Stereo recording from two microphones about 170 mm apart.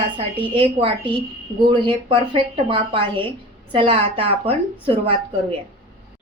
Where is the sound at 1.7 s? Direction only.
30° right (ahead or behind).